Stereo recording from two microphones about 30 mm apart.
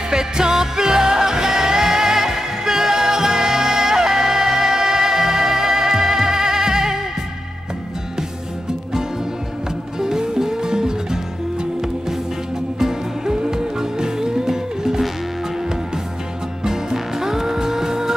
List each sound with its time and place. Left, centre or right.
0.1 s music: right
9.9 s music: right
12.7 s music: centre
16.6 s music: centre